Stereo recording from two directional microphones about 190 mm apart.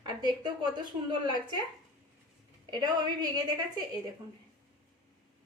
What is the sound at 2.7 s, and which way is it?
Speech, 20° right (ahead or behind).